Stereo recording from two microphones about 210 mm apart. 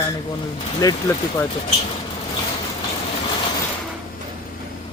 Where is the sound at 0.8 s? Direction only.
15° left (ahead or behind).